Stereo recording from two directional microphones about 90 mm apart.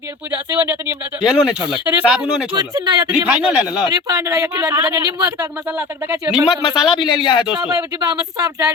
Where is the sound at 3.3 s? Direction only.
15° right (ahead or behind).